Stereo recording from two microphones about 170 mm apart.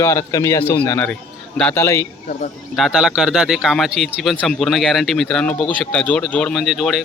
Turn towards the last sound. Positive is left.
turn(degrees=0)  # may be behind; listen again after turning